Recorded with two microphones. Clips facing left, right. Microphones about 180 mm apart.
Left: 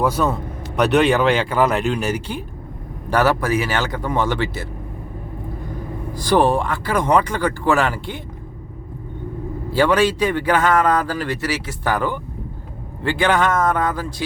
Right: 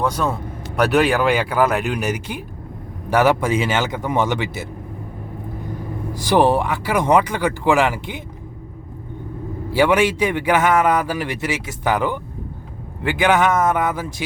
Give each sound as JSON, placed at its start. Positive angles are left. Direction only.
{"t": 0.0, "sound": "a man's voice", "side_deg": 5}
{"t": 6.3, "sound": "a man's voice", "side_deg": -15}
{"t": 9.6, "sound": "a man's voice", "side_deg": -15}